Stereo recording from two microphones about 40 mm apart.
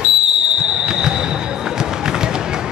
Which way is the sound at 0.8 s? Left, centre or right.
Centre.